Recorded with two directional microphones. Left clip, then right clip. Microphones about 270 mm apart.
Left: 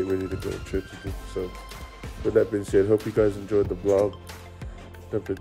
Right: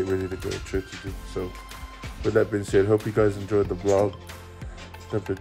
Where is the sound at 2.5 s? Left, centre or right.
Centre.